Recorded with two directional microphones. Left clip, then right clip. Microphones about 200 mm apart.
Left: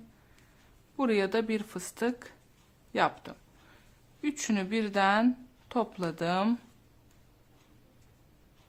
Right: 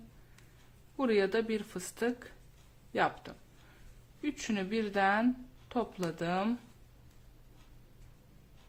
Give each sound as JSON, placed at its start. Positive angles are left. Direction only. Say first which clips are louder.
{"t": 0.9, "sound": "speech", "louder": "left 1 dB", "side_deg": 15}
{"t": 2.9, "sound": "a sound", "louder": "left 3 dB", "side_deg": 15}
{"t": 4.2, "sound": "speech", "louder": "left 4 dB", "side_deg": 15}